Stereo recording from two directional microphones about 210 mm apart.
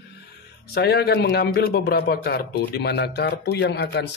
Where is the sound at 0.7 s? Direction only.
50° left (ahead or behind).